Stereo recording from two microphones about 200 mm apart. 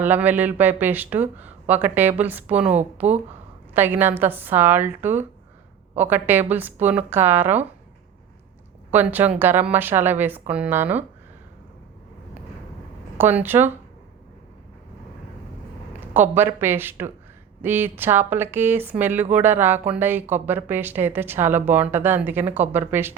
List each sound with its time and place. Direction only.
0.0 s speech: 10° right (ahead or behind)
2.7 s speech: 35° right (ahead or behind)
3.8 s speech: 10° right (ahead or behind)
8.9 s speech: 10° right (ahead or behind)
13.1 s speech: 10° right (ahead or behind)
16.1 s speech: 10° right (ahead or behind)